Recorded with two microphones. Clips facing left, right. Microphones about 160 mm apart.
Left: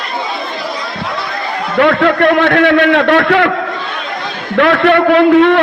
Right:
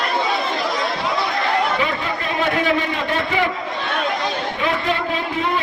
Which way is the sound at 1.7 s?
80° left.